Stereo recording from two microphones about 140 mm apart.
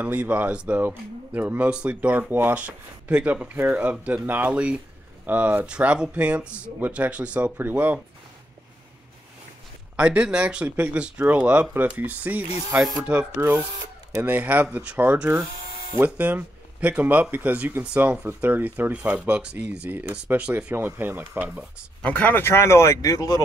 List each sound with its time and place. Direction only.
0.0 s speech: 10° right (ahead or behind)
9.9 s speech: 5° right (ahead or behind)
22.0 s speech: 10° left (ahead or behind)